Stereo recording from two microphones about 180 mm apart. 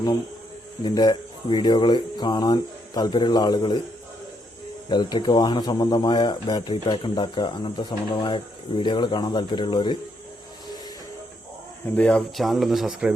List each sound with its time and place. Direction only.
0.9 s speech: 25° left (ahead or behind)
4.9 s speech: 25° left (ahead or behind)
11.9 s speech: 5° left (ahead or behind)